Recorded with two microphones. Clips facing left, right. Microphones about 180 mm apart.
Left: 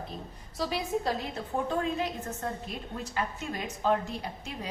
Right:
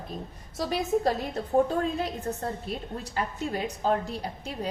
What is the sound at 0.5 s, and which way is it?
A woman's voice, 45° right (ahead or behind).